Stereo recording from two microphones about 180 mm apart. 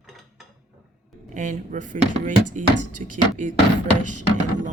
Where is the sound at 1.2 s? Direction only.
45° right (ahead or behind).